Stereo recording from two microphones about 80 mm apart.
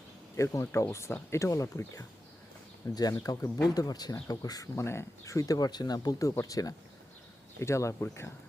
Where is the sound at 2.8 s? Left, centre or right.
Left.